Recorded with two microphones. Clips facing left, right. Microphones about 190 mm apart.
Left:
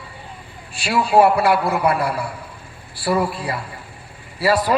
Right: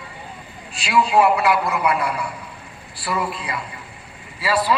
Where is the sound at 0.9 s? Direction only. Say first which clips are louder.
Left 2 dB; 30° left (ahead or behind).